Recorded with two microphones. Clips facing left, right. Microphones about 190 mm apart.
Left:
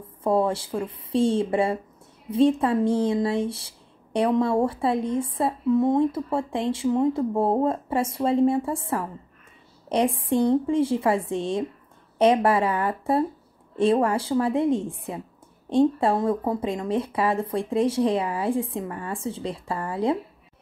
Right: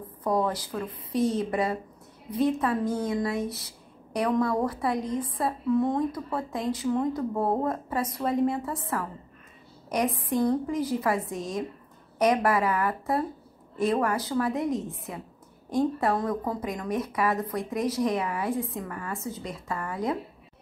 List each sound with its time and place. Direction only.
0.2 s speech: 25° left (ahead or behind)